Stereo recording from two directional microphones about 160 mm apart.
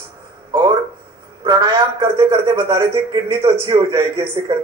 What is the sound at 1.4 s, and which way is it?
A man's voice, 30° right (ahead or behind).